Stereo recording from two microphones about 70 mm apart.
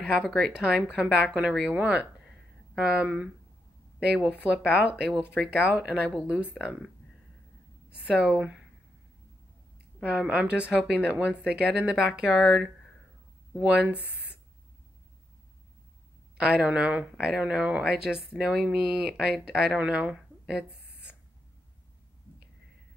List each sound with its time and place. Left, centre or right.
0.2 s speech: centre
0.5 s speech: centre
4.6 s speech: centre
5.2 s speech: left
5.6 s speech: centre
8.0 s speech: centre
10.0 s speech: right
13.7 s speech: right
14.0 s a sound: left
16.3 s speech: centre
20.8 s a sound: left